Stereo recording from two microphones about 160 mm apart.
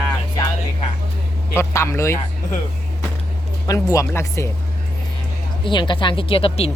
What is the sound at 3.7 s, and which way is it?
Speech, 20° left (ahead or behind).